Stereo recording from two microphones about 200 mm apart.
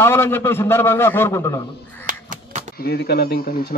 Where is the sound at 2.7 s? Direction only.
50° left (ahead or behind).